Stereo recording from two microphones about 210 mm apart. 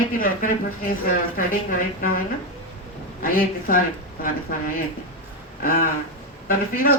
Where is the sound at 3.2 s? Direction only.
40° left (ahead or behind).